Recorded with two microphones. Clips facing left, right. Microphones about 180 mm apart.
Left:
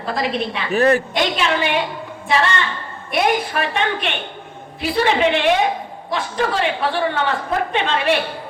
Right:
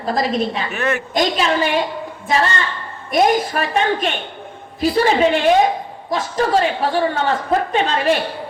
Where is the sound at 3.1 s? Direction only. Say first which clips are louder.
Right 3 dB; 40° right (ahead or behind).